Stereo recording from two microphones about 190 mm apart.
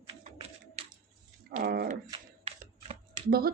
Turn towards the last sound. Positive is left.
turn(degrees=-55)  # may be behind; listen again after turning